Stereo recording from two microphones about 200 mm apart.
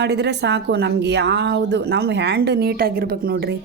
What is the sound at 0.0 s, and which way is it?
A woman's voice, 60° right (ahead or behind).